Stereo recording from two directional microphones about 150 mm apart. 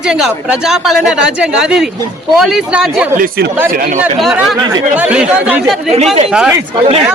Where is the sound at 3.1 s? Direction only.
80° right.